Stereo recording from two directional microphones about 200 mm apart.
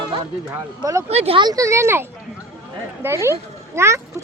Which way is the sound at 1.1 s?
30° right (ahead or behind).